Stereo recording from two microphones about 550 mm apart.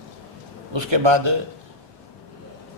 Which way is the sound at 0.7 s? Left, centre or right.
Right.